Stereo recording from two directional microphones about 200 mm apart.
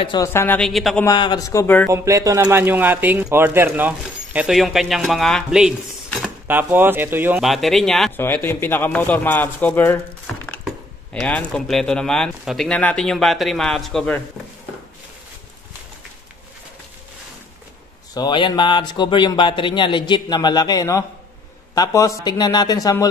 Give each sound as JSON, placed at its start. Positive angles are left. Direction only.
{"t": 0.0, "sound": "speech", "side_deg": 20}
{"t": 1.0, "sound": "speech", "side_deg": 20}
{"t": 1.9, "sound": "speech", "side_deg": -15}
{"t": 18.1, "sound": "speech", "side_deg": 20}